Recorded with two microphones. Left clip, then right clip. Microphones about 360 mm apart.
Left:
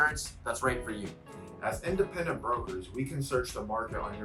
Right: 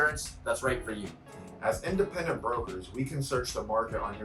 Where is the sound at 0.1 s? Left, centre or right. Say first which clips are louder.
Right 3 dB; centre.